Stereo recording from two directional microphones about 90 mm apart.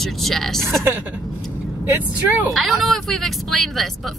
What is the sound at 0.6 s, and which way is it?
Speech, 30° right (ahead or behind).